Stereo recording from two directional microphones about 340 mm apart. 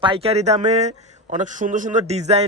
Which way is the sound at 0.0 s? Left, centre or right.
Centre.